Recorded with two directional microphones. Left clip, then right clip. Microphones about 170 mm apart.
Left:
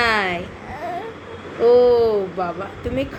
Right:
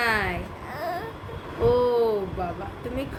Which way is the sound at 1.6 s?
10° left (ahead or behind).